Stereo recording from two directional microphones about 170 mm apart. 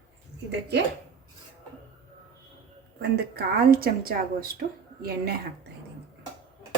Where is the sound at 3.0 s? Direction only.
65° right (ahead or behind).